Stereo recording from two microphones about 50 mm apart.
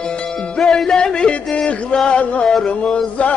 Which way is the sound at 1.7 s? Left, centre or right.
Centre.